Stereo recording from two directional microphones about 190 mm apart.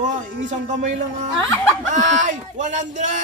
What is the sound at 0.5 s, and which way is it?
Speech, 40° right (ahead or behind).